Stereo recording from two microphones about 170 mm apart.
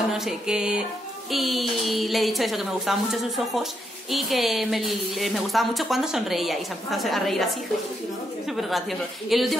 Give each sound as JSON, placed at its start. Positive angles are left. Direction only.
{"t": 0.2, "sound": "a woman's voice", "side_deg": -5}
{"t": 8.5, "sound": "a woman's voice", "side_deg": 0}